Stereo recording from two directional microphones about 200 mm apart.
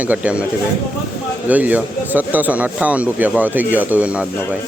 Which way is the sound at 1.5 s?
10° right (ahead or behind).